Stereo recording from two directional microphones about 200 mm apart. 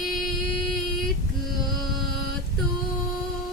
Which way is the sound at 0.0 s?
Centre (ahead or behind).